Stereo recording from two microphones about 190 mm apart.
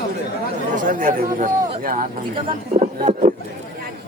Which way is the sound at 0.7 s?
45° right (ahead or behind).